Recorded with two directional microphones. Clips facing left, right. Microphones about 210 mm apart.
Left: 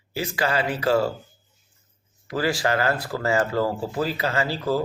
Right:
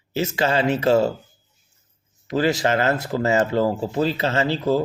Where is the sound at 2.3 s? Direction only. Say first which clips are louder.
Right 4 dB; 20° right (ahead or behind).